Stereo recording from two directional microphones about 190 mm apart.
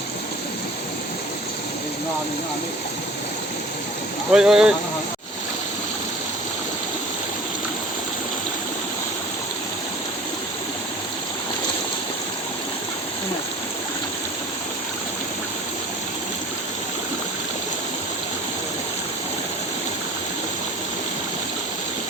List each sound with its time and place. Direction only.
4.3 s speech: 5° right (ahead or behind)